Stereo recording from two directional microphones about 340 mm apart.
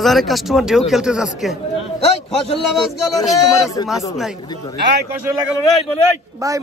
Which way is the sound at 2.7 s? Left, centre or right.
Centre.